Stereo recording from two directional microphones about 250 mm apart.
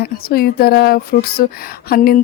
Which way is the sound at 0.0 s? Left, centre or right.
Left.